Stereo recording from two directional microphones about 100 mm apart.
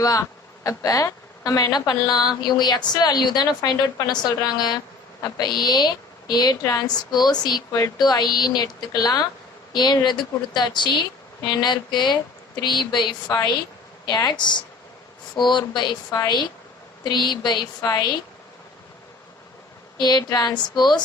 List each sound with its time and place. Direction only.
0.0 s a woman's voice: 35° left (ahead or behind)
20.0 s a woman's voice: 45° left (ahead or behind)